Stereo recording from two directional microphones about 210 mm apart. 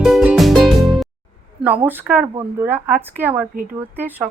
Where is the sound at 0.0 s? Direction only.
5° right (ahead or behind).